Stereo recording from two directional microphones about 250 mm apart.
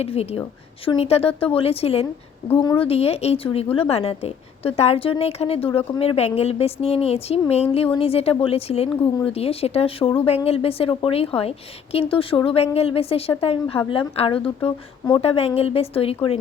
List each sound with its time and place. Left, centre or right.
0.0 s speech: left